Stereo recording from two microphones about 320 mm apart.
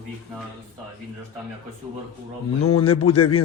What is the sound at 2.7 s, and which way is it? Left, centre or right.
Speech, centre.